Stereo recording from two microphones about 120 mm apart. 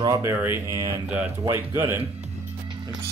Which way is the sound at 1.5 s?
20° right (ahead or behind).